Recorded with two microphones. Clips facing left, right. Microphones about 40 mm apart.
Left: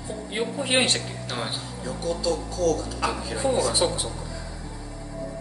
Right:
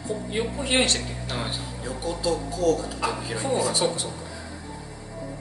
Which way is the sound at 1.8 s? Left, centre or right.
Centre.